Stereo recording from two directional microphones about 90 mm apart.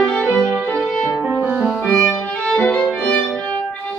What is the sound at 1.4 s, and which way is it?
Music, 15° right (ahead or behind).